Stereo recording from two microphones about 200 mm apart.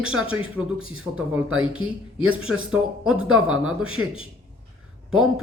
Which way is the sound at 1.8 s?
5° right (ahead or behind).